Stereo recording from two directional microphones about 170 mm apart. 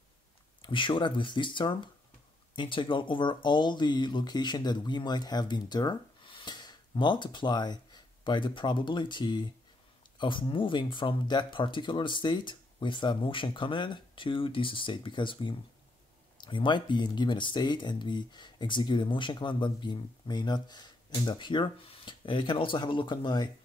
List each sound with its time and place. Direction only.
0.6 s speech: 30° left (ahead or behind)